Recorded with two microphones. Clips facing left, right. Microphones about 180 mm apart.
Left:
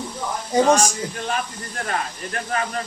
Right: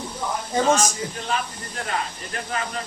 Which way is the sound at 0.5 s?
10° left (ahead or behind).